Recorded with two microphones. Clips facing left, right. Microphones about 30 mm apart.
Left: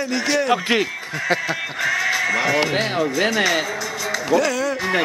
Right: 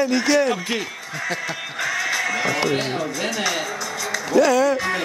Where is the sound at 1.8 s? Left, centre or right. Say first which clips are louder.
Left 3 dB; centre.